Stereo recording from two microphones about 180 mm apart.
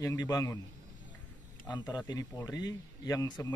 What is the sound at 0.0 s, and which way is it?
Speech, 20° left (ahead or behind).